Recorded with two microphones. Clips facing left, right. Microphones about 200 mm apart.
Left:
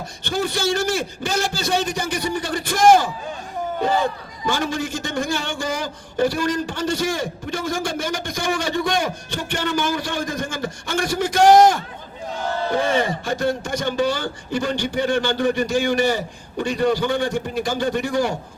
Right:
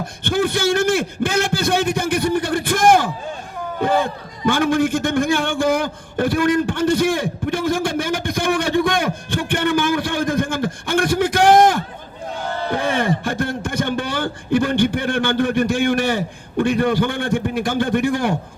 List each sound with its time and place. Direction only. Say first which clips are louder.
0.3 s a man's voice: right 4 dB; 55° right (ahead or behind)